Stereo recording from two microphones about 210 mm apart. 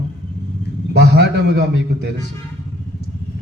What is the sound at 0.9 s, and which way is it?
Speech, 55° right (ahead or behind).